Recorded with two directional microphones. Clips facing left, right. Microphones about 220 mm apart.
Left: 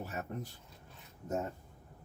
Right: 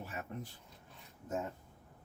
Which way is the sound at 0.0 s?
40° left (ahead or behind).